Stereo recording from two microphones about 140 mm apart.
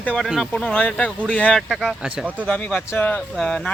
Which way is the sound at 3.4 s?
Centre (ahead or behind).